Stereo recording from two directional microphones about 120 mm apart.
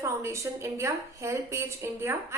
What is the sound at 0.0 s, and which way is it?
A woman's voice, 25° right (ahead or behind).